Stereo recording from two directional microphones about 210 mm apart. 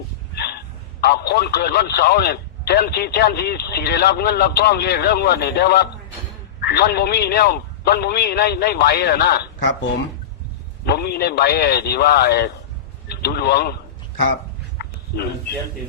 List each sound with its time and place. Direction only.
1.0 s speech: 50° left (ahead or behind)
10.8 s speech: 50° left (ahead or behind)
14.8 s a sound: 50° left (ahead or behind)